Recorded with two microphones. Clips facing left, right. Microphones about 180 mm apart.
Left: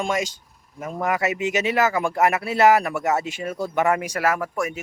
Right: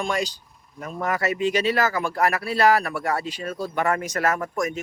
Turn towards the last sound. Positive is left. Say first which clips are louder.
# left 1 dB
turn(degrees=10)  # may be behind; listen again after turning